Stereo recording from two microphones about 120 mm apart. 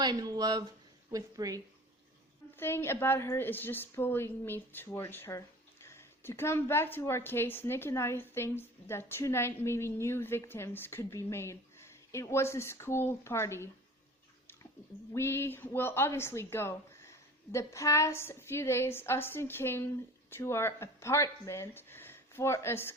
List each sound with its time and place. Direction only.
0.0 s speech: 35° right (ahead or behind)
2.6 s a woman's voice: 20° left (ahead or behind)
15.1 s a woman's voice: 20° left (ahead or behind)